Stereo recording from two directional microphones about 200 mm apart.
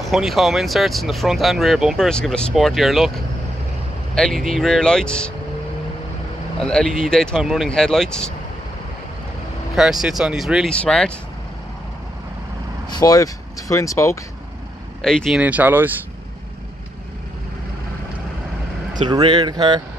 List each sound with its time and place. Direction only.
0.0 s speech: centre (ahead or behind)
4.1 s speech: centre (ahead or behind)
6.6 s speech: 5° left (ahead or behind)
9.8 s speech: centre (ahead or behind)
12.9 s speech: 20° left (ahead or behind)
15.0 s speech: centre (ahead or behind)
19.0 s speech: 20° right (ahead or behind)